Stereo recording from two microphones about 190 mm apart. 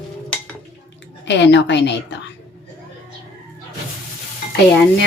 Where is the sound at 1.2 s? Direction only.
70° left (ahead or behind).